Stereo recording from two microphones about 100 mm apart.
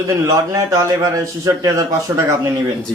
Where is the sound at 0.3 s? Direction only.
30° right (ahead or behind).